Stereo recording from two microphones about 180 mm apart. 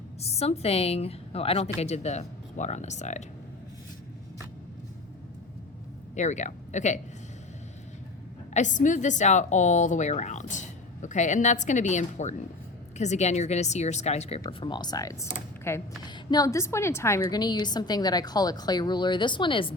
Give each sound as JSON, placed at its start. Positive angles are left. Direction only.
{"t": 0.2, "sound": "a woman's voice", "side_deg": 35}
{"t": 6.1, "sound": "a woman's voice", "side_deg": 40}
{"t": 8.5, "sound": "a woman's voice", "side_deg": 45}
{"t": 14.4, "sound": "a woman's voice", "side_deg": 25}